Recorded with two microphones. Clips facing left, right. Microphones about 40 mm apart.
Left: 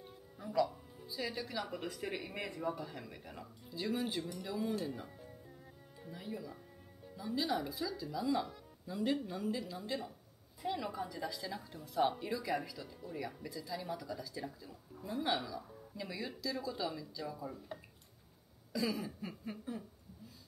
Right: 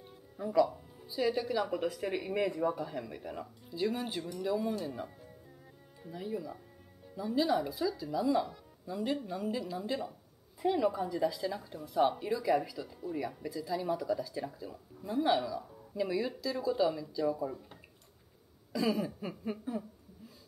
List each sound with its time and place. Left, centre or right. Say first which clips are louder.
0.4 s a woman's voice: right 6 dB; centre
14.4 s speech: right 5 dB; centre
15.0 s a woman's voice: right 7 dB; centre
18.7 s a woman's voice: right 5 dB; centre